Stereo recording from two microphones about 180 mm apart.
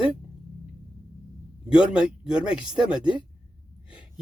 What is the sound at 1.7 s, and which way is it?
Speech, 5° right (ahead or behind).